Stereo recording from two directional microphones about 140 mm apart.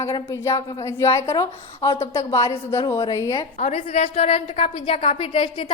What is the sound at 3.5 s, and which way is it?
A woman's voice, 55° left (ahead or behind).